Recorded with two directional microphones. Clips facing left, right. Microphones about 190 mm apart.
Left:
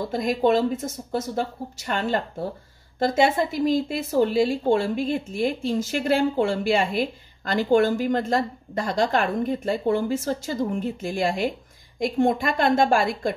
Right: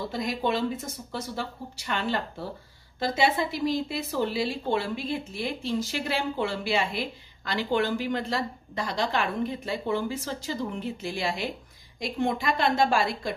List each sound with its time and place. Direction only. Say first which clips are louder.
0.1 s speech: left 9 dB; 50° left (ahead or behind)